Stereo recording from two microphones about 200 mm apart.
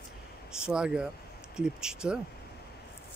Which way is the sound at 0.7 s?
5° right (ahead or behind).